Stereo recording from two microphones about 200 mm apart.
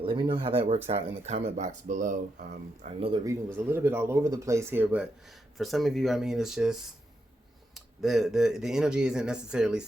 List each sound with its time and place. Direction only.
0.0 s speech: 25° right (ahead or behind)
3.0 s speech: 25° right (ahead or behind)
3.5 s speech: 10° right (ahead or behind)